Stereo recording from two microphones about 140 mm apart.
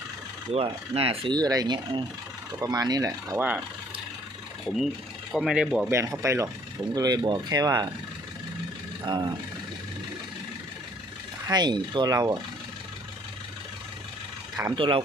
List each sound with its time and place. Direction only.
0.5 s speech: 45° right (ahead or behind); by 3.4 s 25° right (ahead or behind)
5.3 s speech: centre (ahead or behind)
5.9 s speech: 20° right (ahead or behind)
9.0 s speech: 30° right (ahead or behind)
11.4 s speech: 30° right (ahead or behind)
14.8 s speech: 40° right (ahead or behind)